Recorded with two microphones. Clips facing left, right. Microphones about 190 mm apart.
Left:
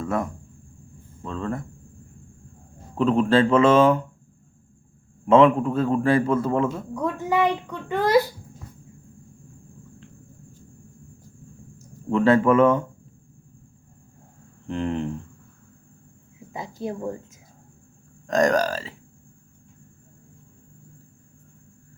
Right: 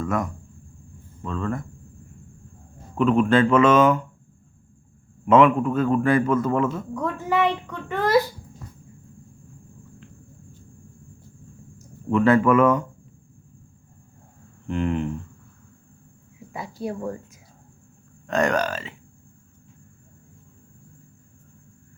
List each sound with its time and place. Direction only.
0.0 s a man's voice: 30° left (ahead or behind)
2.9 s speech: 30° left (ahead or behind)
5.2 s a man's voice: 30° left (ahead or behind)
6.9 s a child's voice: 15° left (ahead or behind)
12.1 s a man's voice: 30° left (ahead or behind)
14.7 s speech: 30° left (ahead or behind)
16.5 s a man's voice: 20° left (ahead or behind)
18.3 s speech: 40° left (ahead or behind)